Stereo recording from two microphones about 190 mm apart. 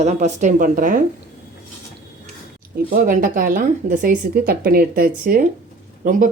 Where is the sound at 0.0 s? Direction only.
35° right (ahead or behind).